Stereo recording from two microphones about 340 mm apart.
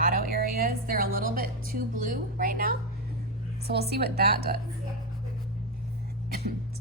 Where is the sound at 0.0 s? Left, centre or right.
Right.